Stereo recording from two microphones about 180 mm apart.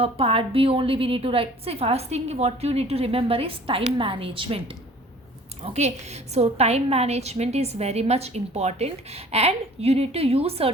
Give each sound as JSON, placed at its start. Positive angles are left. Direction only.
{"t": 0.0, "sound": "a woman's voice", "side_deg": -30}